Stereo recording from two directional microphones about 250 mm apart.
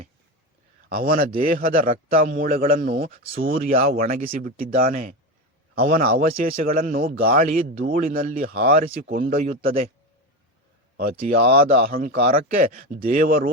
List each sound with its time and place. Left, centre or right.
0.9 s speech: right
10.9 s speech: right